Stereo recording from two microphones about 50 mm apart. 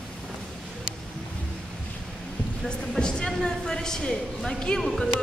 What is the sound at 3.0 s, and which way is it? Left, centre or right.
A woman's voice, centre.